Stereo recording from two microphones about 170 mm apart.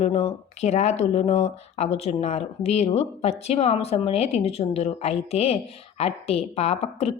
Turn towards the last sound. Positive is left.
turn(degrees=35)  # may be behind; listen again after turning